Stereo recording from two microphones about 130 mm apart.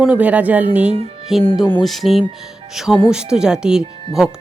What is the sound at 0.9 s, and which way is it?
Music, 55° right (ahead or behind).